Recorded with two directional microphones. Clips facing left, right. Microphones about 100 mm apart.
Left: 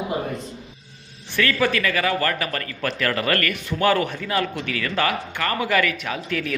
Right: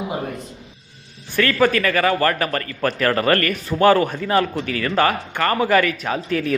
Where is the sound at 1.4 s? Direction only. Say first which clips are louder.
Right 4 dB; 45° right (ahead or behind).